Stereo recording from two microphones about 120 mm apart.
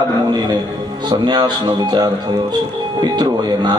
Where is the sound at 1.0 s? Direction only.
40° right (ahead or behind).